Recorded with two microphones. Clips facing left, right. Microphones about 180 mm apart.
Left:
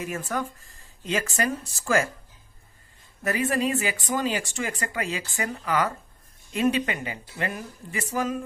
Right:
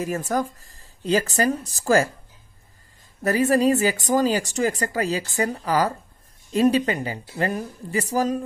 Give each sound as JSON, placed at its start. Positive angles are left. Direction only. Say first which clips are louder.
{"t": 0.0, "sound": "speech", "louder": "right 5 dB", "side_deg": -35}
{"t": 3.3, "sound": "speech", "louder": "right 7 dB", "side_deg": -40}